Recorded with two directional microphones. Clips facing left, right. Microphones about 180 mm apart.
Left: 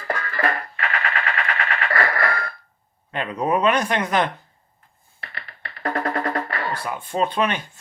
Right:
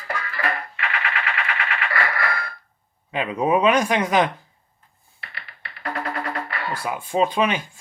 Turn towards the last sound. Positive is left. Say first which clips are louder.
# right 2 dB
turn(degrees=-10)  # may be behind; listen again after turning